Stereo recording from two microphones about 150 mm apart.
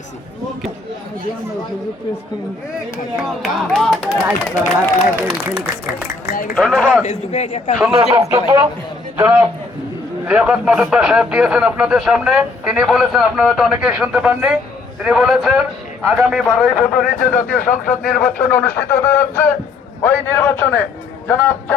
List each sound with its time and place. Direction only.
3.2 s speech: 5° left (ahead or behind)
4.7 s speech: 15° right (ahead or behind)
6.3 s speech: 65° left (ahead or behind)
6.6 s speech: centre (ahead or behind)
7.0 s a man's voice: 50° left (ahead or behind)
8.1 s speech: 20° right (ahead or behind); by 17.1 s centre (ahead or behind)
17.3 s speech: 10° left (ahead or behind)